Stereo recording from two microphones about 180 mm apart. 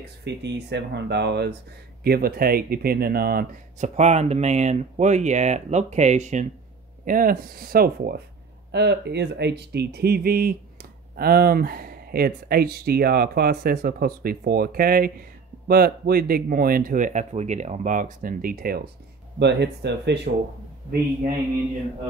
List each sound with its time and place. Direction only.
0.2 s speech: 75° right (ahead or behind)
2.0 s speech: 55° right (ahead or behind)
3.9 s speech: 40° right (ahead or behind)
7.1 s speech: 50° right (ahead or behind)
8.7 s speech: 70° right (ahead or behind); by 18.8 s 55° right (ahead or behind)
19.3 s speech: 70° right (ahead or behind)